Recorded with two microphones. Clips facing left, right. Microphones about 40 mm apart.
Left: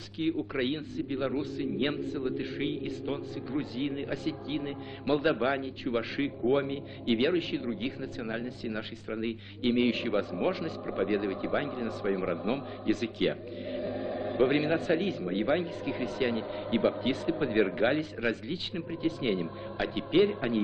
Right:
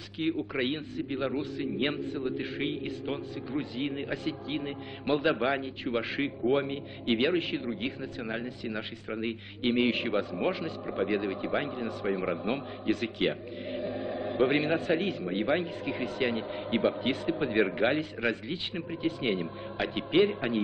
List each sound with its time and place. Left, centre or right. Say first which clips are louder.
0.6 s speech: even; centre